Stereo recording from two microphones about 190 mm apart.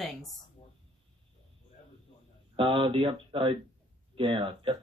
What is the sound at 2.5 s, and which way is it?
Speech, 25° right (ahead or behind).